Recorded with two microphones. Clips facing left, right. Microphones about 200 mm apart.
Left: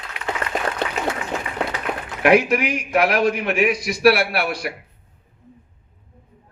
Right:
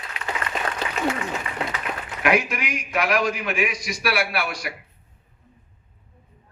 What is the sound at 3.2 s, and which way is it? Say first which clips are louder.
A man's voice: left 5 dB; 60° left (ahead or behind).